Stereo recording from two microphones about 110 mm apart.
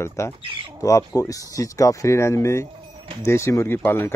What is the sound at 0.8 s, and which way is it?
Speech, 30° left (ahead or behind).